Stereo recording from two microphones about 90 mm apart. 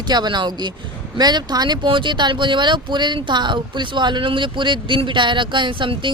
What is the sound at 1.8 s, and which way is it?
Speech, 65° right (ahead or behind).